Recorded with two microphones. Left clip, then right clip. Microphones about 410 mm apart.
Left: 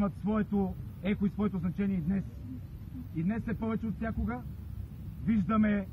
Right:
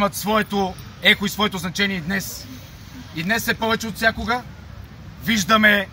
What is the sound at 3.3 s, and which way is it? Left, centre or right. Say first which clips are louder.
Speech: right 17 dB; centre.